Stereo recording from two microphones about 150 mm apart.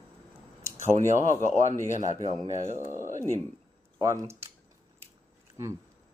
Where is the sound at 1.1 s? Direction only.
55° left (ahead or behind).